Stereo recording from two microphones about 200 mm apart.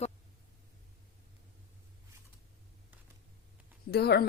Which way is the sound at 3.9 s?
55° left (ahead or behind).